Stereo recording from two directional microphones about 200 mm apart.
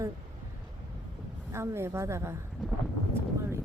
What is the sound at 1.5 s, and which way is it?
Speech, 15° right (ahead or behind).